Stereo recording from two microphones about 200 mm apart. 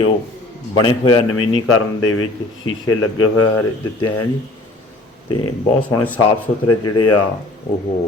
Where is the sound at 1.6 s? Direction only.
90° left.